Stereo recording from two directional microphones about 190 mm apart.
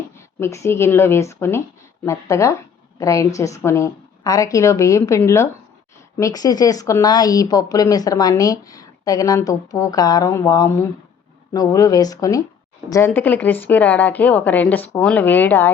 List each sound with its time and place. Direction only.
0.3 s a woman's voice: 15° left (ahead or behind)